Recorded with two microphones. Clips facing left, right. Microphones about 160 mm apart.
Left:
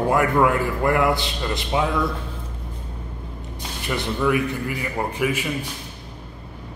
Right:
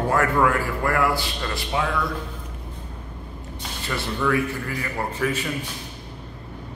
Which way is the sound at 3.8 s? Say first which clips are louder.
Left 3 dB; 15° left (ahead or behind).